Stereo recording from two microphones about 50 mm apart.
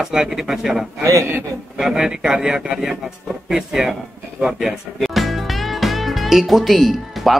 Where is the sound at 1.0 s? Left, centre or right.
Right.